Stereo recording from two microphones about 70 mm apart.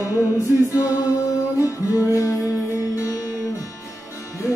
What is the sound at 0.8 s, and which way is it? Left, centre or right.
Music, left.